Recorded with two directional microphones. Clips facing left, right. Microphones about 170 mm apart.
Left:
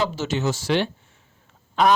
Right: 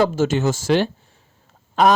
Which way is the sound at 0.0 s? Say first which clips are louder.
Right 6 dB; 50° right (ahead or behind).